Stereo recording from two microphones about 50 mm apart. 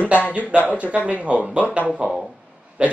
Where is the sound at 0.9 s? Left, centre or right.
Right.